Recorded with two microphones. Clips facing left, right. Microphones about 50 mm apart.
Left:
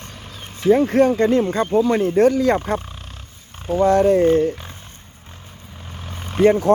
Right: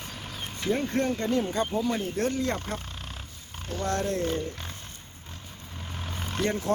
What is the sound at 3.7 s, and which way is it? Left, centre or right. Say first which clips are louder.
Speech: left 15 dB; centre.